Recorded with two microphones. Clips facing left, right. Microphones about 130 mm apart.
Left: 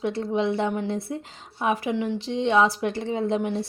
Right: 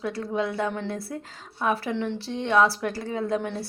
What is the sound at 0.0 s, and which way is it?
A woman's voice, 25° left (ahead or behind).